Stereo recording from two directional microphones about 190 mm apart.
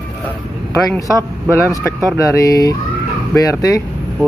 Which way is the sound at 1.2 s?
15° right (ahead or behind).